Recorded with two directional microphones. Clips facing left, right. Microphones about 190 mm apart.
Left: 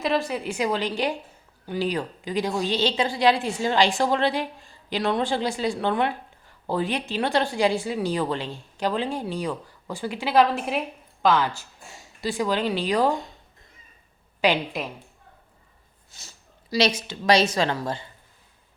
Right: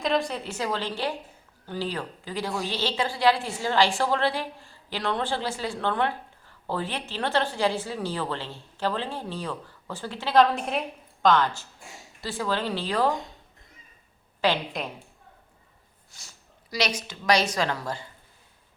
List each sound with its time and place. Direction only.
0.0 s a woman's voice: 5° left (ahead or behind)
14.4 s a woman's voice: 15° left (ahead or behind)
16.1 s a woman's voice: 25° left (ahead or behind)